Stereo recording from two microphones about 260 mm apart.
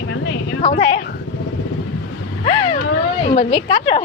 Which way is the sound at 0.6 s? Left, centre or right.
Left.